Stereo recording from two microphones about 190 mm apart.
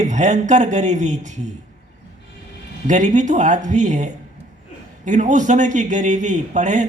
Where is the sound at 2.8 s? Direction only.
40° right (ahead or behind).